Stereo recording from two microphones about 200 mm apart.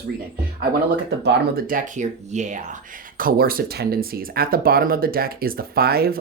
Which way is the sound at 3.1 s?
45° right (ahead or behind).